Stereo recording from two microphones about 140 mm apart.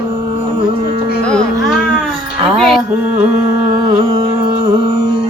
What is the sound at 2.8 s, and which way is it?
Music, 15° right (ahead or behind).